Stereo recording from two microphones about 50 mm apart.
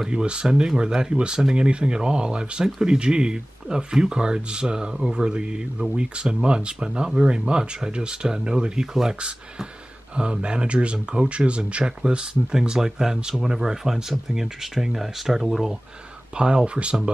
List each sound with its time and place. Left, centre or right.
0.0 s speech: centre
10.1 s speech: centre
16.3 s speech: centre